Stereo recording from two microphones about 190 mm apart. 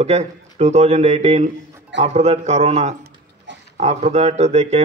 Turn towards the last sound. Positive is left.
turn(degrees=-35)  # may be behind; listen again after turning